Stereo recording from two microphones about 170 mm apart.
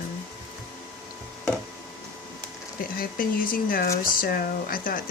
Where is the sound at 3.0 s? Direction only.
55° left (ahead or behind).